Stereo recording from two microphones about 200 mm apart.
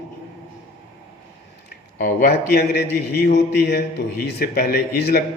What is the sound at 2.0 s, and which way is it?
A man's voice, 45° left (ahead or behind).